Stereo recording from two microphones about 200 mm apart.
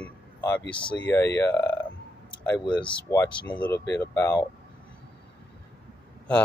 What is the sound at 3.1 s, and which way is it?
Speech, 10° left (ahead or behind).